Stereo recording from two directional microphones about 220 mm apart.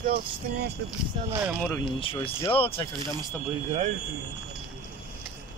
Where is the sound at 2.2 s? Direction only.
25° left (ahead or behind).